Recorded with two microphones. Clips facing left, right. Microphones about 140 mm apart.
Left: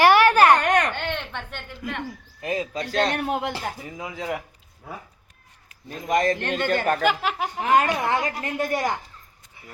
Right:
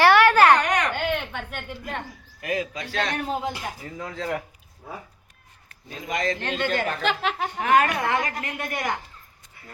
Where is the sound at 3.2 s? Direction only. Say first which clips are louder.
Left 2 dB; 65° left (ahead or behind).